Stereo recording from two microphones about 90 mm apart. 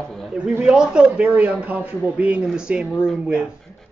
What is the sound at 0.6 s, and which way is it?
A man's voice, 10° right (ahead or behind).